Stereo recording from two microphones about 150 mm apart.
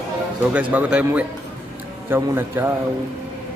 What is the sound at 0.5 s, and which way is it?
A man's voice, 10° right (ahead or behind).